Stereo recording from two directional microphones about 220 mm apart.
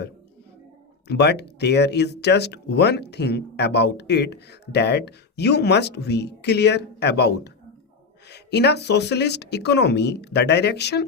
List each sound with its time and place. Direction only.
1.0 s speech: 50° left (ahead or behind)